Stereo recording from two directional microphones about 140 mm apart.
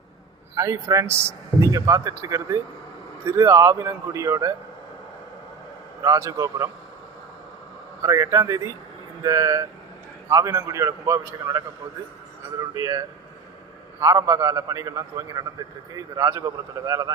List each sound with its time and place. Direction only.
0.5 s speech: 20° right (ahead or behind)
6.0 s speech: 25° right (ahead or behind)
8.0 s speech: 25° right (ahead or behind)